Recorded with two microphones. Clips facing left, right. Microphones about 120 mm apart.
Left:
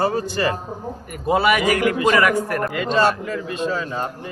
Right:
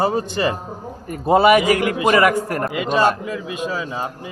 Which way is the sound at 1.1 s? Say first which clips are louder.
Right 5 dB; 30° right (ahead or behind).